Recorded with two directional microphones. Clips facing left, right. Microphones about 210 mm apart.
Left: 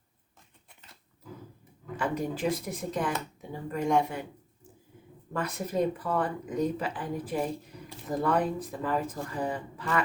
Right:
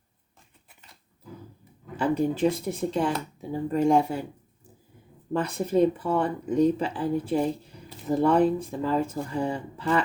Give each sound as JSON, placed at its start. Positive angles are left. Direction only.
{"t": 2.0, "sound": "speech", "side_deg": -25}
{"t": 5.3, "sound": "speech", "side_deg": -30}